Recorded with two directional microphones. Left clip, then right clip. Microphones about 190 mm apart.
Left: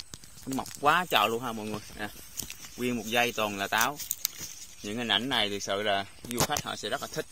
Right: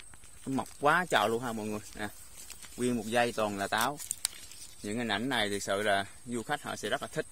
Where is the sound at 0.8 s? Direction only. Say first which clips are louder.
Left 2 dB; 20° right (ahead or behind).